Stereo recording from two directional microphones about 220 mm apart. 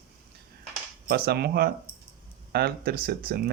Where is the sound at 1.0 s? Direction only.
45° right (ahead or behind).